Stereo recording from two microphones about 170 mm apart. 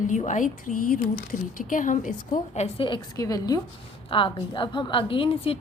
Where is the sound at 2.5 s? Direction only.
35° left (ahead or behind).